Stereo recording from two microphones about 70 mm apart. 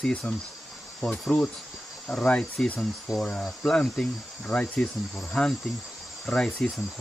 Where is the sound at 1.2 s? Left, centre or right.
Centre.